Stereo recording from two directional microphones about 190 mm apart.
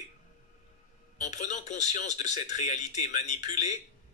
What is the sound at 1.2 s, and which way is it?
Speech, 40° left (ahead or behind).